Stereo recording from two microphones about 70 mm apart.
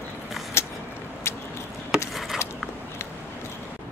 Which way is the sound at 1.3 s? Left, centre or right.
Left.